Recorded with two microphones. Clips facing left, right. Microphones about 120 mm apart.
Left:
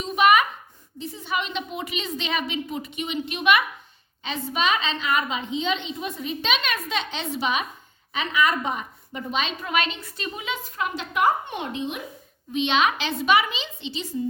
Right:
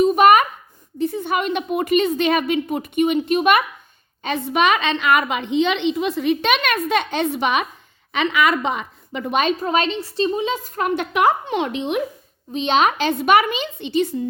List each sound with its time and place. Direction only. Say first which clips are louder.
0.0 s a sound: right 6 dB; 50° right (ahead or behind)
0.9 s a woman's voice: right 8 dB; 55° right (ahead or behind)
4.2 s a woman's voice: right 7 dB; 60° right (ahead or behind)
8.1 s a woman's voice: right 5 dB; 75° right (ahead or behind)
9.3 s a woman's voice: right 7 dB; 50° right (ahead or behind); by 12.0 s 70° right (ahead or behind)
12.5 s a woman's voice: right 4 dB; 40° right (ahead or behind); by 14.2 s 60° right (ahead or behind)